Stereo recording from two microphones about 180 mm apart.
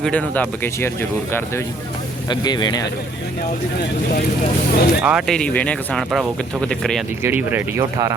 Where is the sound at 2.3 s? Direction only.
25° left (ahead or behind).